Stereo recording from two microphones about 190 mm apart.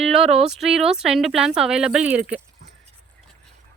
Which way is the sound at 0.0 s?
Centre (ahead or behind).